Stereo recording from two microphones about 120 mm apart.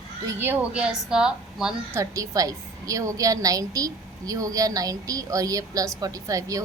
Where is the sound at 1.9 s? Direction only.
25° right (ahead or behind).